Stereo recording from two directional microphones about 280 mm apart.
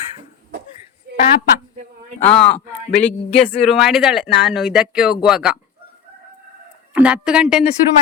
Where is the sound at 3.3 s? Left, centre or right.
Left.